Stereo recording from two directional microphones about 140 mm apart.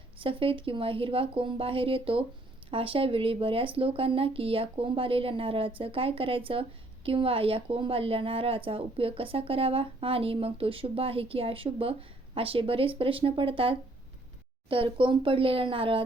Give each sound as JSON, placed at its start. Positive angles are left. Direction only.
{"t": 0.2, "sound": "speech", "side_deg": -40}